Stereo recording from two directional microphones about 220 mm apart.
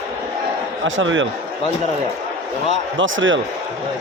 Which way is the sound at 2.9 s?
60° right (ahead or behind).